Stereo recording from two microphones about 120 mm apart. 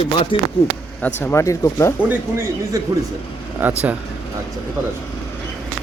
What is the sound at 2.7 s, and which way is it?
Speech, 30° right (ahead or behind).